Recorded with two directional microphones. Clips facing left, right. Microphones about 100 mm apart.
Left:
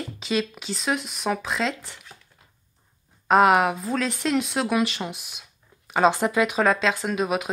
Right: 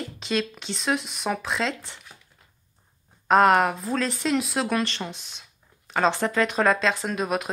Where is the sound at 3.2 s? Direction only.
5° left (ahead or behind).